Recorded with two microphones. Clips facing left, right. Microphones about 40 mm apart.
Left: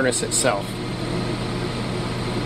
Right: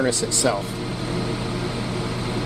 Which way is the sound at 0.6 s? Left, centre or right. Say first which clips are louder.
Even; centre.